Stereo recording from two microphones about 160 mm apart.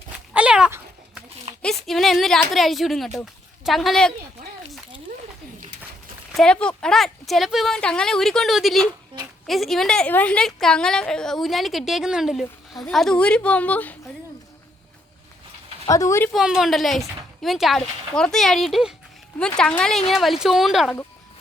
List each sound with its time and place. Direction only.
0.3 s cat: 5° right (ahead or behind)
1.6 s a woman's voice: centre (ahead or behind)
4.4 s a sound: 70° right (ahead or behind)
6.3 s a woman's voice: 5° left (ahead or behind)
15.9 s speech: 20° left (ahead or behind)
16.3 s a woman's voice: 5° right (ahead or behind)